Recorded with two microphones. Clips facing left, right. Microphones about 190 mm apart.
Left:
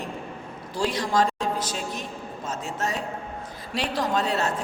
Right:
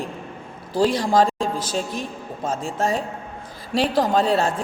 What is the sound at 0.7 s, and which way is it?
A woman's voice, 35° right (ahead or behind).